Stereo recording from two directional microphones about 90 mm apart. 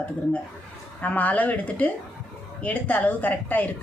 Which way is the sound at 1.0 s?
20° left (ahead or behind).